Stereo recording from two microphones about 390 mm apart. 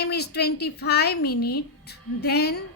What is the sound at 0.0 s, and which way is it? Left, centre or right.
A woman's voice, left.